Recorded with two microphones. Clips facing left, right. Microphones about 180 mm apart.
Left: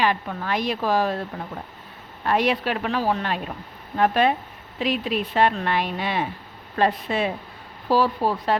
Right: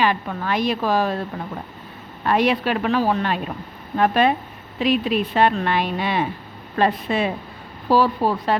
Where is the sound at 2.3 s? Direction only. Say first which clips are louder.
Right 3 dB; 60° right (ahead or behind).